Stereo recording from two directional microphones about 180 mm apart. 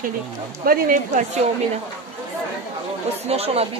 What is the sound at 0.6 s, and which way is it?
Speech, 55° right (ahead or behind).